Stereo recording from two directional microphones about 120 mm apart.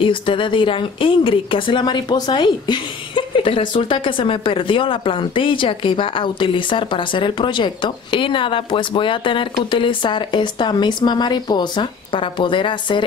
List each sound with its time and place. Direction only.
0.0 s speech: 45° left (ahead or behind)